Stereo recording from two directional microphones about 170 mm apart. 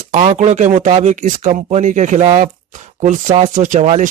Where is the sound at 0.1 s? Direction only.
45° right (ahead or behind).